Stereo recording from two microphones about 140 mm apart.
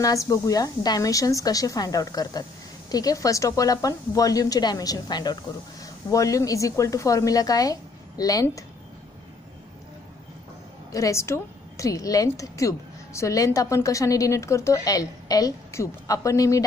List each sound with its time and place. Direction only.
0.0 s speech: 25° left (ahead or behind)
10.9 s speech: 20° left (ahead or behind)